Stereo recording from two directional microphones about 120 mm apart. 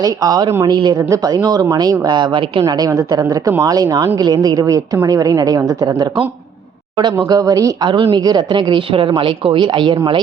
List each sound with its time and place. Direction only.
0.0 s speech: 30° right (ahead or behind)
7.9 s speech: 40° right (ahead or behind)